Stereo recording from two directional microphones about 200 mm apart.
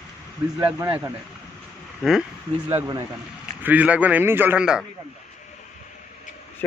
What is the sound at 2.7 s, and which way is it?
Speech, 15° right (ahead or behind).